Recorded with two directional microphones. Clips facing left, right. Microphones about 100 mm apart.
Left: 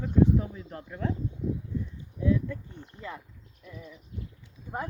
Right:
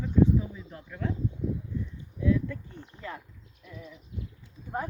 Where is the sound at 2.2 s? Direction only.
25° left (ahead or behind).